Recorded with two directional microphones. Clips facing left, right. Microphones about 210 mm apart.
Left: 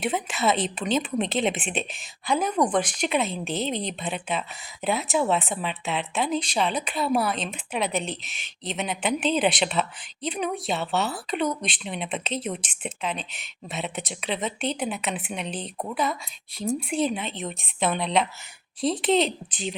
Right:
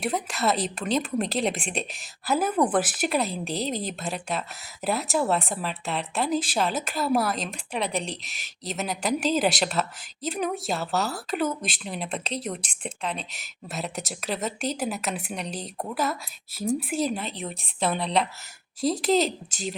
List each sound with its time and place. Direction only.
0.0 s speech: centre (ahead or behind)
19.2 s speech: 45° right (ahead or behind)